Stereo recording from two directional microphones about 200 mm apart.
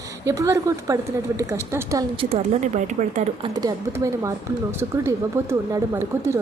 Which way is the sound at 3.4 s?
20° right (ahead or behind).